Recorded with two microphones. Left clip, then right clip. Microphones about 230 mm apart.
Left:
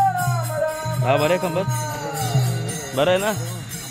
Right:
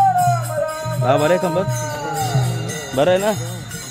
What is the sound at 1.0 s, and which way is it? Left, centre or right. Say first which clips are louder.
Speech: right 3 dB; right.